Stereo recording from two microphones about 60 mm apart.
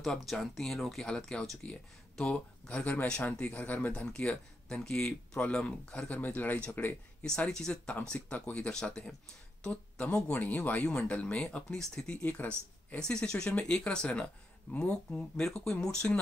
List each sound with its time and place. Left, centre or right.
0.0 s speech: centre
6.0 s speech: left
7.2 s speech: centre
9.6 s a sound: centre
10.1 s speech: centre
10.4 s speech: left
11.5 s speech: centre
13.0 s speech: centre